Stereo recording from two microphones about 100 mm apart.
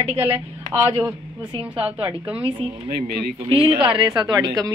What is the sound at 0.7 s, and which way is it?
Speech, 50° right (ahead or behind).